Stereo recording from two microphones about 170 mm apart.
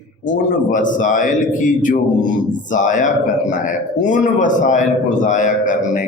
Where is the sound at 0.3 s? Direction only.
50° left (ahead or behind).